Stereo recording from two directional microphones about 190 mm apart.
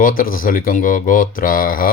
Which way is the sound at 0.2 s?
50° left (ahead or behind).